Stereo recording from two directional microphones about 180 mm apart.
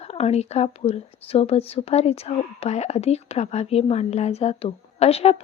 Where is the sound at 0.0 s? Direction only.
35° left (ahead or behind).